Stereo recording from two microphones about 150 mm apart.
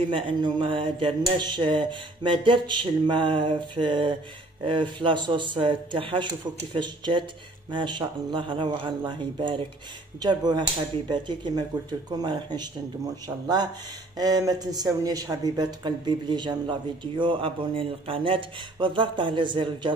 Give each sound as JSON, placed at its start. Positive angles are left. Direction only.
{"t": 0.1, "sound": "speech", "side_deg": -35}
{"t": 14.1, "sound": "speech", "side_deg": -25}